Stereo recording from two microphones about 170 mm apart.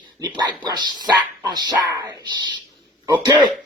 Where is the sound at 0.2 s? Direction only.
25° right (ahead or behind).